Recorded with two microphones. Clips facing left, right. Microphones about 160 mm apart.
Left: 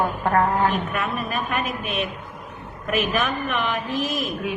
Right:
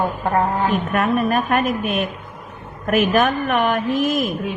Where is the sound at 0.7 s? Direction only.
50° right (ahead or behind).